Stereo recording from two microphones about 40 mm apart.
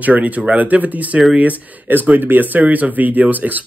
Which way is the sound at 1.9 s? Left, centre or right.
Right.